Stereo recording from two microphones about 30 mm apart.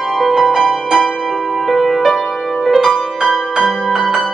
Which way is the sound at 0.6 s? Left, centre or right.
Centre.